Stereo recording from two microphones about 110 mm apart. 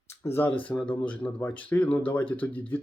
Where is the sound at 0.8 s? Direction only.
10° left (ahead or behind).